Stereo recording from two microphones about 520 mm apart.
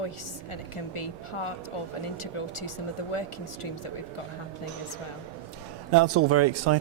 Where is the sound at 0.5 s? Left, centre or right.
Left.